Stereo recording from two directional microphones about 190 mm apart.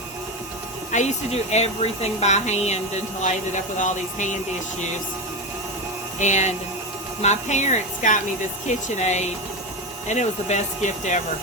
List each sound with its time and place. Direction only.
0.9 s speech: 40° left (ahead or behind)
6.1 s speech: 40° left (ahead or behind)